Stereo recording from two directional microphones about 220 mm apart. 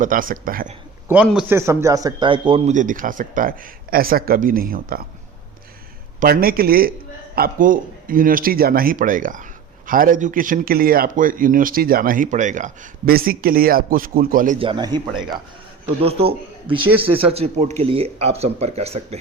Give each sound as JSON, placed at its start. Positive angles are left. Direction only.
{"t": 0.0, "sound": "speech", "side_deg": -40}
{"t": 1.0, "sound": "speech", "side_deg": -5}
{"t": 6.1, "sound": "speech", "side_deg": -40}
{"t": 14.6, "sound": "speech", "side_deg": -20}